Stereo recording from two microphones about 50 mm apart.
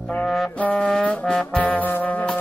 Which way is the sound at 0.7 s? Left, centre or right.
Centre.